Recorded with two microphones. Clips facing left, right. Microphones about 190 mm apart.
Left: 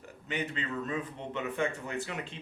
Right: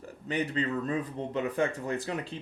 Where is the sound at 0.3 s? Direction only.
35° right (ahead or behind).